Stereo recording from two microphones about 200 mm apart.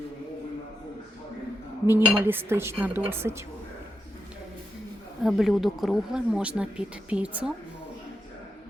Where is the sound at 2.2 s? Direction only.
10° right (ahead or behind).